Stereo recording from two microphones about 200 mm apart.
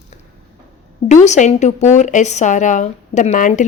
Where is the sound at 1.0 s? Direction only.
35° left (ahead or behind).